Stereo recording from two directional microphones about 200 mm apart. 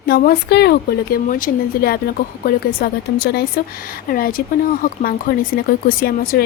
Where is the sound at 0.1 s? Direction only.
50° left (ahead or behind).